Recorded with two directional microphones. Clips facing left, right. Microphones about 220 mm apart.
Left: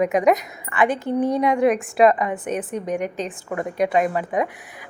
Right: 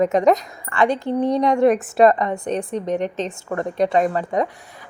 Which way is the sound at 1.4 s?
Centre (ahead or behind).